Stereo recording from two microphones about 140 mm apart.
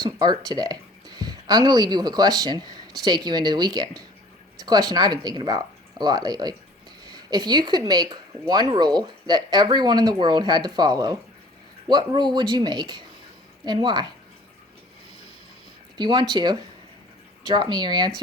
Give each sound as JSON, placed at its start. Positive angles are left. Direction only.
{"t": 0.0, "sound": "speech", "side_deg": -30}
{"t": 16.0, "sound": "speech", "side_deg": -35}